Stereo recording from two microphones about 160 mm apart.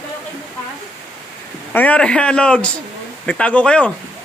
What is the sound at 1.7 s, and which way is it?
A man's voice, 10° left (ahead or behind).